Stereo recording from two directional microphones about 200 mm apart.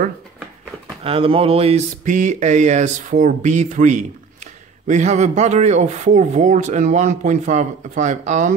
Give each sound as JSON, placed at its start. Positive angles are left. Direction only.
{"t": 1.0, "sound": "speech", "side_deg": -25}